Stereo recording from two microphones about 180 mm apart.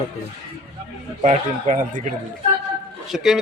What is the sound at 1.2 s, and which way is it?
Speech, 45° right (ahead or behind).